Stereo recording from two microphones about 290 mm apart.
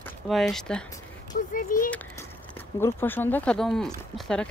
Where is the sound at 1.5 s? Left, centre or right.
Left.